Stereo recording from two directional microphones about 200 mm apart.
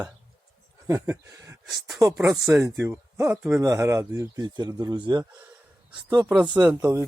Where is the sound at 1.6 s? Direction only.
Centre (ahead or behind).